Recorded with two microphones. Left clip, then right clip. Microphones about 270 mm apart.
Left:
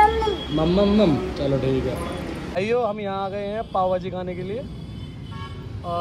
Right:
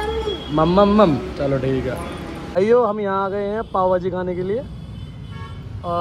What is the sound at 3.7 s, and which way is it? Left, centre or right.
Speech, right.